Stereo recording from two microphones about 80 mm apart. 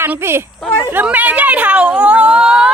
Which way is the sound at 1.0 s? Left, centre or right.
Centre.